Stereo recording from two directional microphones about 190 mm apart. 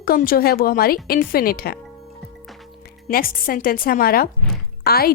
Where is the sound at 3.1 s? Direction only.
50° left (ahead or behind).